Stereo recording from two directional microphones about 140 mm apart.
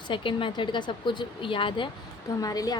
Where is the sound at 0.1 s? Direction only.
35° left (ahead or behind).